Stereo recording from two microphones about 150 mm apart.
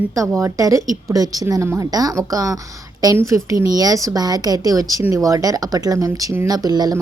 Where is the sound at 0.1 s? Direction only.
20° right (ahead or behind).